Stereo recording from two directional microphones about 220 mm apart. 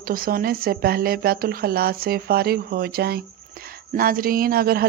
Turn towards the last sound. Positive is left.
turn(degrees=-45)  # may be behind; listen again after turning